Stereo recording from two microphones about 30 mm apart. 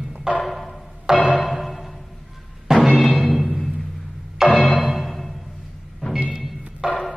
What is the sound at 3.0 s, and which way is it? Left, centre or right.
Music, centre.